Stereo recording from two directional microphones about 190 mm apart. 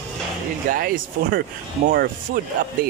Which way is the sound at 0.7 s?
50° right (ahead or behind).